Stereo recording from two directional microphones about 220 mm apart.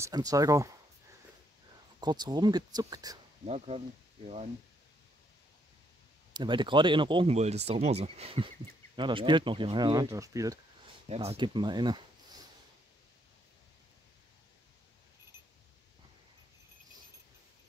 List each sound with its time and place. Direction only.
0.0 s speech: 15° right (ahead or behind)
2.0 s speech: 20° right (ahead or behind)
3.4 s speech: 30° right (ahead or behind)
6.3 s speech: 20° right (ahead or behind)
11.1 s speech: 25° right (ahead or behind)